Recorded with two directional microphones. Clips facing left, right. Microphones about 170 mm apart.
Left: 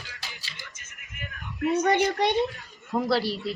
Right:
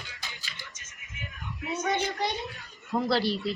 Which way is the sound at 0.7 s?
60° left (ahead or behind).